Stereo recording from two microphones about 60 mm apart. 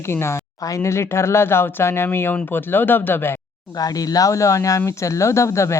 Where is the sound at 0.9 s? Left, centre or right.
Left.